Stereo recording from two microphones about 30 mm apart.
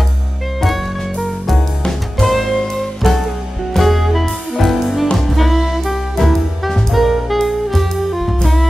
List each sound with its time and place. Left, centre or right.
1.2 s music: centre
2.5 s music: centre
3.0 s music: centre
6.1 s music: centre